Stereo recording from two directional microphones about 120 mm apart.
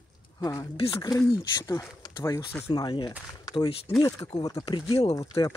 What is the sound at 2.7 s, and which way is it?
Speech, 40° left (ahead or behind).